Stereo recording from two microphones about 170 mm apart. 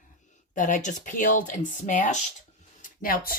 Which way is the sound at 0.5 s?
50° left (ahead or behind).